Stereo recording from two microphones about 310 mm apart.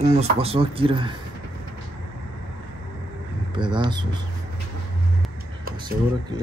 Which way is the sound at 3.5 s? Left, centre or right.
Centre.